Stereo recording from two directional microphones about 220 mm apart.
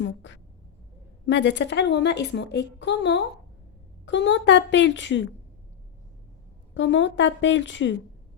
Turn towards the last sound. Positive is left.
turn(degrees=55)  # may be behind; listen again after turning